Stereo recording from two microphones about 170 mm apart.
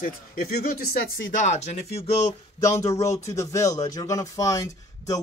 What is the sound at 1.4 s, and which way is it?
Speech, 40° left (ahead or behind).